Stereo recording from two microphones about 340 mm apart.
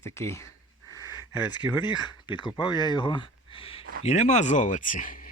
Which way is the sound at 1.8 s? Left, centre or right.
Centre.